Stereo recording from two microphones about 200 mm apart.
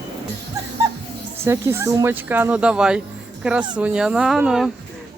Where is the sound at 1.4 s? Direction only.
10° right (ahead or behind).